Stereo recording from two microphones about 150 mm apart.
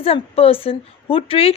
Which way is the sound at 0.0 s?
40° left (ahead or behind).